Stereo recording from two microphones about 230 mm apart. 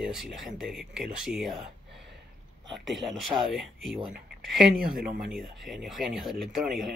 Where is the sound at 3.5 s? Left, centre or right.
Centre.